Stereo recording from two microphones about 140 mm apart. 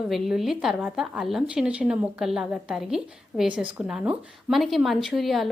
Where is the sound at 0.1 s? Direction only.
Centre (ahead or behind).